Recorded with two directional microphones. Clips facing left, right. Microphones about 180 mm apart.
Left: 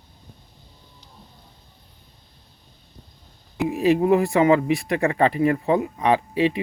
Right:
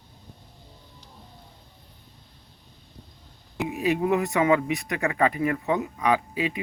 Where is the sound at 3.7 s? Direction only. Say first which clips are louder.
Left 6 dB; 35° left (ahead or behind).